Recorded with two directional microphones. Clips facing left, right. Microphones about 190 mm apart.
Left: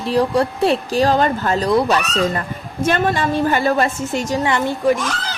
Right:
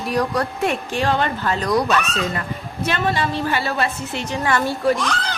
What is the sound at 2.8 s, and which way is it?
A woman's voice, 50° left (ahead or behind).